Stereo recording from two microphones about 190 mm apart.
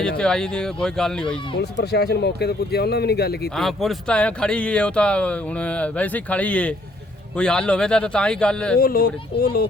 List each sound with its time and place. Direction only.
0.2 s speech: 5° left (ahead or behind)
1.8 s speech: 60° left (ahead or behind)
3.6 s speech: centre (ahead or behind)
8.8 s speech: 50° left (ahead or behind)